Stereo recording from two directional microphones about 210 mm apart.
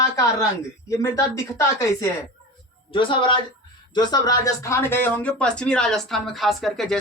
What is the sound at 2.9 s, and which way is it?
Speech, 25° left (ahead or behind).